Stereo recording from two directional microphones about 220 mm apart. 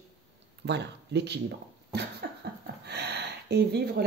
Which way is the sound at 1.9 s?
45° right (ahead or behind).